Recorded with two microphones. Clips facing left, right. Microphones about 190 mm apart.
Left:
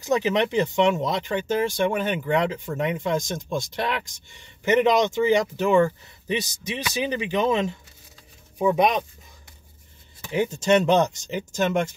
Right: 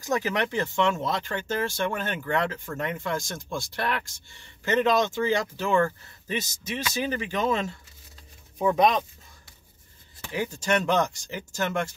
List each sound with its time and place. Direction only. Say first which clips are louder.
0.0 s speech: left 5 dB; 20° left (ahead or behind)
10.3 s speech: left 6 dB; 20° left (ahead or behind)